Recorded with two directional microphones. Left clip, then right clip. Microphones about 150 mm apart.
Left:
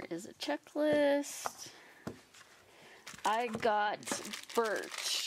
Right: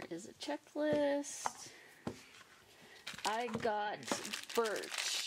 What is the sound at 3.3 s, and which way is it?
Speech, 30° left (ahead or behind).